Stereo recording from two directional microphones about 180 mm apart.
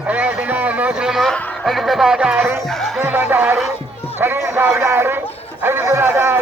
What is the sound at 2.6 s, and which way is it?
Speech, centre (ahead or behind).